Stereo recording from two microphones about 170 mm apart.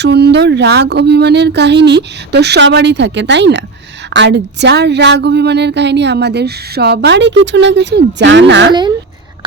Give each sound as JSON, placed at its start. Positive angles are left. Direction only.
{"t": 0.0, "sound": "a woman's voice", "side_deg": -80}